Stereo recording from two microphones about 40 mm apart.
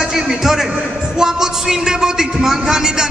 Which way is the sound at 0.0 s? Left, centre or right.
Centre.